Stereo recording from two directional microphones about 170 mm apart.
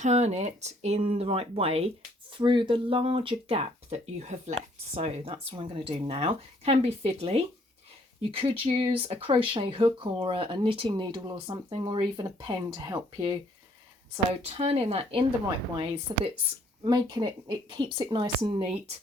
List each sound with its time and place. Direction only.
0.0 s speech: 40° right (ahead or behind); by 13.4 s 25° right (ahead or behind)
14.4 s speech: 35° right (ahead or behind)